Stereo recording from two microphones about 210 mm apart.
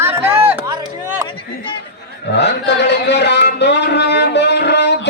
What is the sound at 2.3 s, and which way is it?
A man's voice, 55° left (ahead or behind).